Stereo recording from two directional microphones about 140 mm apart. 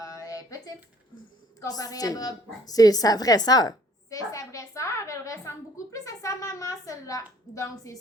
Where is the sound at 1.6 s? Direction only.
25° left (ahead or behind).